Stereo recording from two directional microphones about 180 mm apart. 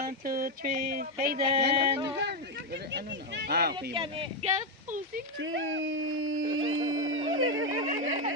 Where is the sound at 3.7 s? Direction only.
25° right (ahead or behind).